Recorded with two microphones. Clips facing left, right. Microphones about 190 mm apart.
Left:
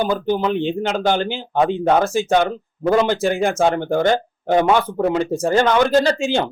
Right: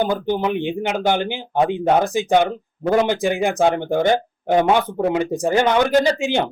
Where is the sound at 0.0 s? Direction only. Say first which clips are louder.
Left 1 dB; 15° right (ahead or behind).